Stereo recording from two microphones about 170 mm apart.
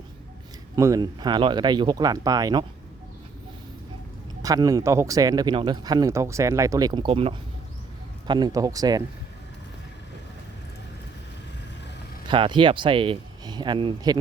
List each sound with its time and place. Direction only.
0.8 s speech: 20° right (ahead or behind)
4.4 s speech: 20° right (ahead or behind)
12.3 s speech: 30° right (ahead or behind)